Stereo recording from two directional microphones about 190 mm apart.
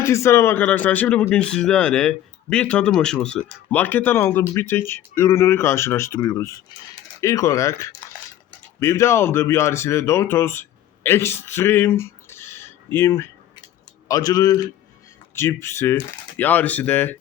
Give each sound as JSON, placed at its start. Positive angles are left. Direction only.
{"t": 0.0, "sound": "speech", "side_deg": 15}